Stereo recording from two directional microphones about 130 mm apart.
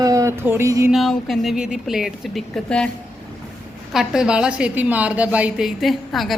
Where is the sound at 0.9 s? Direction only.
Centre (ahead or behind).